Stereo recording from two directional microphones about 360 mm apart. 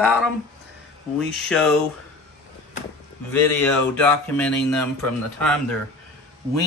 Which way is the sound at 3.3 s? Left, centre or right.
Centre.